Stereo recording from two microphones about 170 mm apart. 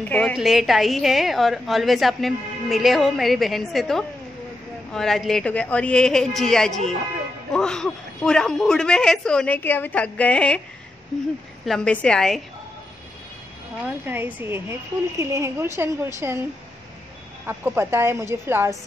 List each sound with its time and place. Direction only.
0.1 s a woman's voice: centre (ahead or behind)
11.6 s a woman's voice: 5° left (ahead or behind)
14.0 s a woman's voice: 10° right (ahead or behind)
17.5 s a woman's voice: 15° right (ahead or behind)